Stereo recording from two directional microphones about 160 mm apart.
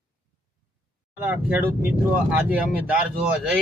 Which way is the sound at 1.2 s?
10° right (ahead or behind).